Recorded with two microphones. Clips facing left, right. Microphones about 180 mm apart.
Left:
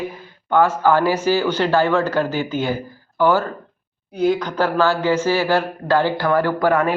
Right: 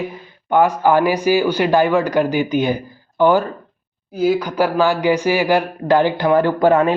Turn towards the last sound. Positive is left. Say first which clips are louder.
# right 4 dB
turn(degrees=-20)  # may be behind; listen again after turning